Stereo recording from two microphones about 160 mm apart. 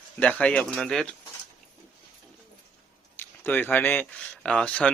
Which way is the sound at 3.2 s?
10° left (ahead or behind).